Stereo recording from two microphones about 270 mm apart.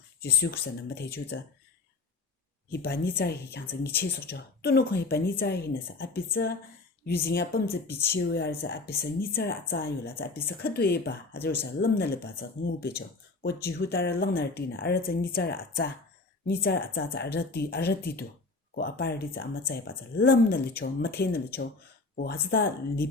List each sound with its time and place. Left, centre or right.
0.2 s speech: left
2.6 s speech: left
7.9 s speech: centre
8.1 s speech: left